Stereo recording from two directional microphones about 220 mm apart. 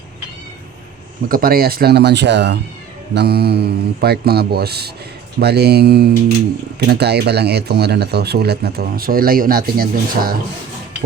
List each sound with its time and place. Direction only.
1.3 s speech: 40° right (ahead or behind)